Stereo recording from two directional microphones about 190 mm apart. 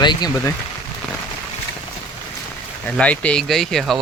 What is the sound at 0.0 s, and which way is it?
Speech, 20° left (ahead or behind).